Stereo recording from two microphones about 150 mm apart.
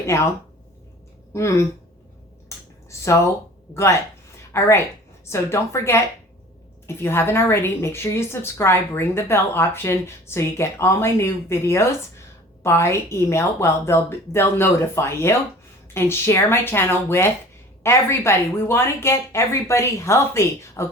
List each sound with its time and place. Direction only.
1.3 s speech: 20° left (ahead or behind)
2.9 s speech: 20° left (ahead or behind)
5.2 s a woman's voice: 20° left (ahead or behind)